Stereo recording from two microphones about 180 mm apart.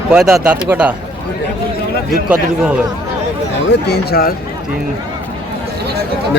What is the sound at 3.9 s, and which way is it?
Speech, 55° left (ahead or behind).